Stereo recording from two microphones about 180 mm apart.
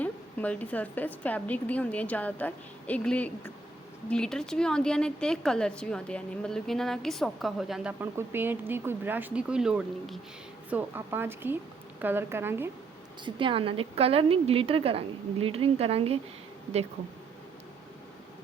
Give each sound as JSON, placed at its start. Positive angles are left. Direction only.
{"t": 0.0, "sound": "a woman's voice", "side_deg": 10}
{"t": 13.2, "sound": "a woman's voice", "side_deg": -30}